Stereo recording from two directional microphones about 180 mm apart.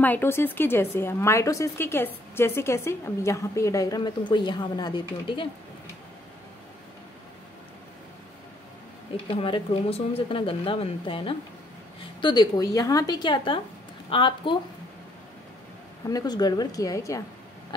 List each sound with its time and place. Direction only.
0.0 s a woman's voice: 10° left (ahead or behind); by 5.5 s 25° left (ahead or behind)
9.1 s a woman's voice: 30° left (ahead or behind)
16.1 s a woman's voice: 20° left (ahead or behind)